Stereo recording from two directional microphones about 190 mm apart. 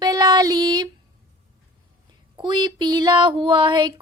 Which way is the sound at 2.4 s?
25° right (ahead or behind).